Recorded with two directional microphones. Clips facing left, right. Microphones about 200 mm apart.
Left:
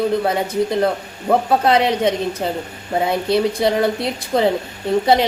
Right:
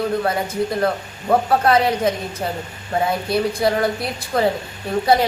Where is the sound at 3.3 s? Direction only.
25° left (ahead or behind).